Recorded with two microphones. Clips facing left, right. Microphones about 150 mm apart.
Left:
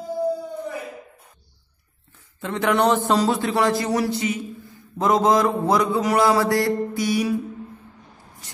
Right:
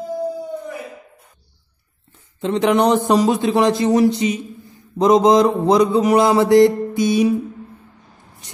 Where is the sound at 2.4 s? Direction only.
20° right (ahead or behind).